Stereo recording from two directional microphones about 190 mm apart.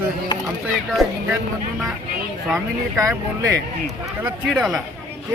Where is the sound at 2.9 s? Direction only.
15° right (ahead or behind).